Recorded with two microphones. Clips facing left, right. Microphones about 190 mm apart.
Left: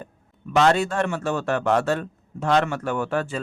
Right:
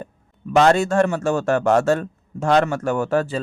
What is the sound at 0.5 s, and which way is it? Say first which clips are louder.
A man's voice: right 4 dB; 45° right (ahead or behind).